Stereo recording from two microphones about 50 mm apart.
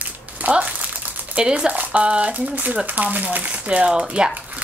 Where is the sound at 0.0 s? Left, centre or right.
Right.